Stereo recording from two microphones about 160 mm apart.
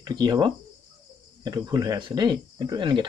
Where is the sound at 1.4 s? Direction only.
25° right (ahead or behind).